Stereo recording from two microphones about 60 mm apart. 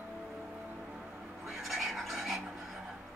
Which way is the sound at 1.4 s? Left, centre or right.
Centre.